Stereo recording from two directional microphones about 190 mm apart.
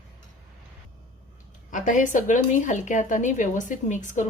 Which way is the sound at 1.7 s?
40° left (ahead or behind).